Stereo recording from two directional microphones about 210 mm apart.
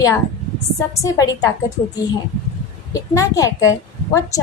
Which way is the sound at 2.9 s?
15° left (ahead or behind).